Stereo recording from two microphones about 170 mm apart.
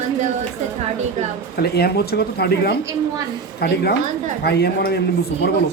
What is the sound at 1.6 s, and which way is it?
Speech, 70° left (ahead or behind).